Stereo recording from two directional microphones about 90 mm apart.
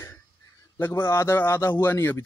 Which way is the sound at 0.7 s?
25° left (ahead or behind).